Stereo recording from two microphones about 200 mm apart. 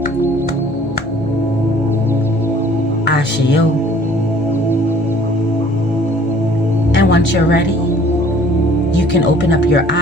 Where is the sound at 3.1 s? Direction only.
60° left (ahead or behind).